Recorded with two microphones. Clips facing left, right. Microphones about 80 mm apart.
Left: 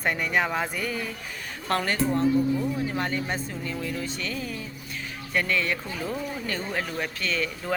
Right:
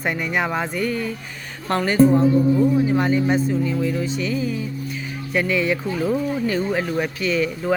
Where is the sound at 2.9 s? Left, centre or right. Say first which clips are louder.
Right 10 dB; centre.